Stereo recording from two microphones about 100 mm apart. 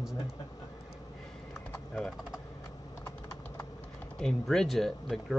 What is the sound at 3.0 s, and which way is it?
Typing, 30° left (ahead or behind).